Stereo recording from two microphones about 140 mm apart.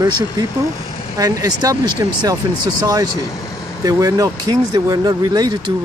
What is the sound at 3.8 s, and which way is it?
Speech, 25° right (ahead or behind).